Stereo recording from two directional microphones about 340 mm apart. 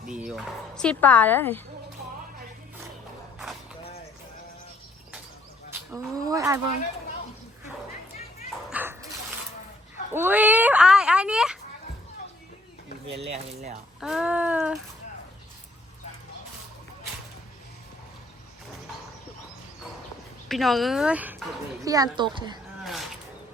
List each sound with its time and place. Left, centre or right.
0.1 s speech: centre
5.7 s speech: centre
8.7 s dog: centre
10.1 s speech: centre
13.2 s speech: centre
14.0 s speech: centre
20.5 s speech: centre
22.8 s a sound: centre